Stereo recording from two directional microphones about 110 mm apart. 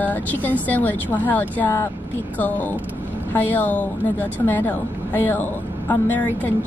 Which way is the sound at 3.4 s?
15° left (ahead or behind).